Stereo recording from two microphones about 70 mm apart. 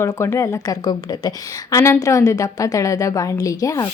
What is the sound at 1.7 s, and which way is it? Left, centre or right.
Speech, left.